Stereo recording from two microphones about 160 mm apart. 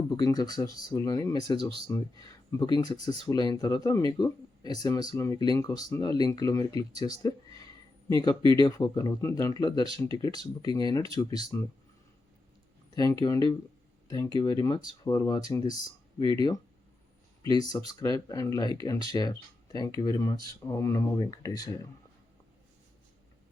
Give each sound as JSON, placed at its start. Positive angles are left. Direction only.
{"t": 0.1, "sound": "speech", "side_deg": 25}
{"t": 12.9, "sound": "speech", "side_deg": 25}
{"t": 17.6, "sound": "speech", "side_deg": 25}